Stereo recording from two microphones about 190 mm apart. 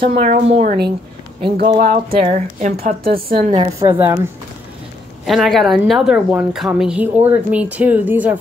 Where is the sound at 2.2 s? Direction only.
40° right (ahead or behind).